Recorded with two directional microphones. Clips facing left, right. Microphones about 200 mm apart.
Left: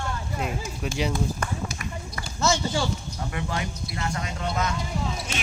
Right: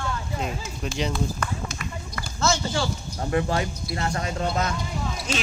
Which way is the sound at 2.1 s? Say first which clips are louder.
Even; 15° left (ahead or behind).